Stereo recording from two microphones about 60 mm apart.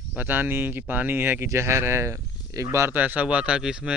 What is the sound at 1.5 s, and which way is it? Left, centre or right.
Speech, right.